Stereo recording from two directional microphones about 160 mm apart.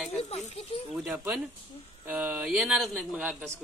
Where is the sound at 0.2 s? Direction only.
40° left (ahead or behind).